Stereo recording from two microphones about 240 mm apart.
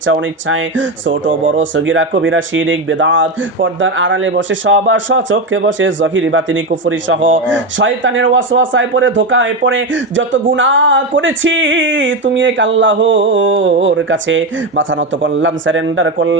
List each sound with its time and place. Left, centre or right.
0.0 s speech: right